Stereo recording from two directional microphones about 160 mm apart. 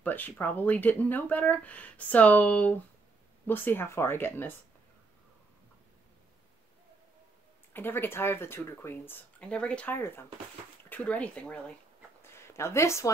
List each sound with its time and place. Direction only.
0.0 s speech: 10° left (ahead or behind)
7.7 s speech: 15° left (ahead or behind)
12.2 s a sound: 15° left (ahead or behind)